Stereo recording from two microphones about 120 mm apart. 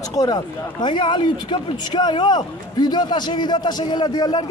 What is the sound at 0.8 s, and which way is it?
Speech, 40° left (ahead or behind).